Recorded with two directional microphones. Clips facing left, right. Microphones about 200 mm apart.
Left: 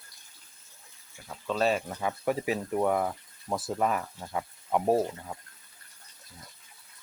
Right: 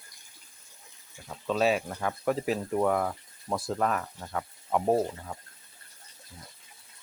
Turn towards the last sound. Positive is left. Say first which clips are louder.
# even
turn(degrees=10)  # may be behind; listen again after turning